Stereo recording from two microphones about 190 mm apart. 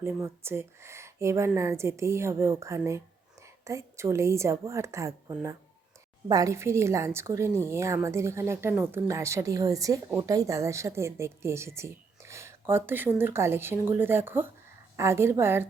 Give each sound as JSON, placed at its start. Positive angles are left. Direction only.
{"t": 0.0, "sound": "a woman's voice", "side_deg": -15}